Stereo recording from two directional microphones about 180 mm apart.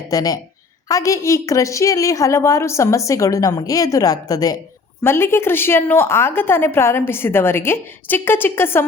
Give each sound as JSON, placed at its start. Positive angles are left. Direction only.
{"t": 0.1, "sound": "a woman's voice", "side_deg": 20}